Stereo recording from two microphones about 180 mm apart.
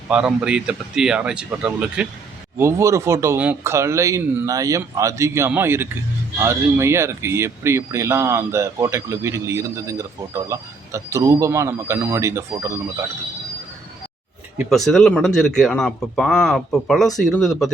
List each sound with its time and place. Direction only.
0.1 s speech: 5° right (ahead or behind)
2.6 s speech: 15° right (ahead or behind)
14.6 s speech: centre (ahead or behind)